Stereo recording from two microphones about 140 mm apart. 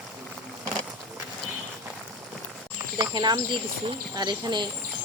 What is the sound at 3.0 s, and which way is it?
Speech, 30° right (ahead or behind).